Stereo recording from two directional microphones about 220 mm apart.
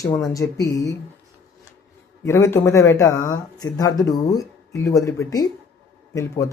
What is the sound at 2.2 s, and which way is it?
Speech, 10° left (ahead or behind).